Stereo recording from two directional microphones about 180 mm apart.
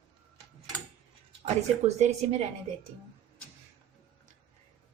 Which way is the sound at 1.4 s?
40° right (ahead or behind).